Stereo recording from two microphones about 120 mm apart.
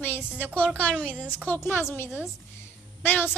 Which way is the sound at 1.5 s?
15° left (ahead or behind).